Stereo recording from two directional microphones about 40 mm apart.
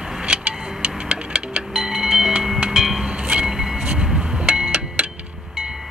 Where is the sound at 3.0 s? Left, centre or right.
Right.